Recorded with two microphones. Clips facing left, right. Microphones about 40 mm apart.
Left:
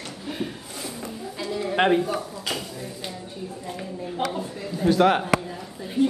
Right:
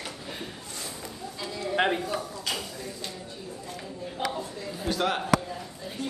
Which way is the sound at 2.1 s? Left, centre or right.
Centre.